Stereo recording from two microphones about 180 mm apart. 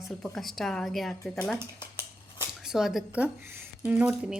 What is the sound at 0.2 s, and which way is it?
Speech, centre (ahead or behind).